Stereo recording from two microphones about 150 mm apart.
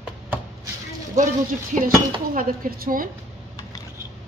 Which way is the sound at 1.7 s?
55° right (ahead or behind).